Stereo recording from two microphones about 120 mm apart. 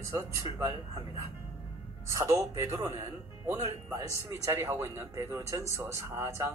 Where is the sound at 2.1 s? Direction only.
30° right (ahead or behind).